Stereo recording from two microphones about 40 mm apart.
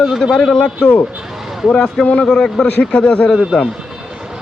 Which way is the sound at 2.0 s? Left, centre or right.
Left.